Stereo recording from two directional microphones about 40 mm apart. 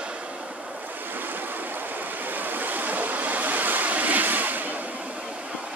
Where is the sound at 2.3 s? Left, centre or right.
Right.